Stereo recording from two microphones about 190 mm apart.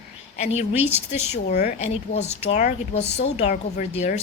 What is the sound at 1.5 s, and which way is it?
Speech, 55° left (ahead or behind).